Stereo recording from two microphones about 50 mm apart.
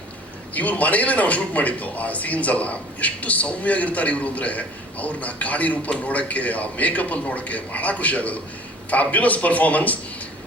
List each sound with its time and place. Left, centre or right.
0.5 s speech: left